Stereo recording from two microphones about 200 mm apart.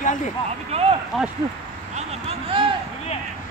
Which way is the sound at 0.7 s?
30° right (ahead or behind).